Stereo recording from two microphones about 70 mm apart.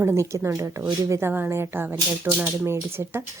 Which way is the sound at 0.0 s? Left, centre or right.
Right.